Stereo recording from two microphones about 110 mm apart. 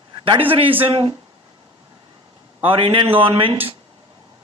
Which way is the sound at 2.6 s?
55° right (ahead or behind).